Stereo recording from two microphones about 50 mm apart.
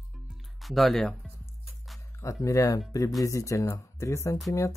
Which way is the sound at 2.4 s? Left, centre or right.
Left.